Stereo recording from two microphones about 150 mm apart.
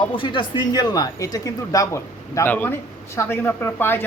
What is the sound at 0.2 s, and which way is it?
A man's voice, 30° left (ahead or behind).